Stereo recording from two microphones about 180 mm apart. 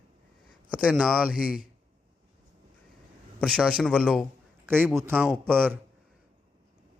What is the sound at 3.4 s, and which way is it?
Speech, 5° left (ahead or behind).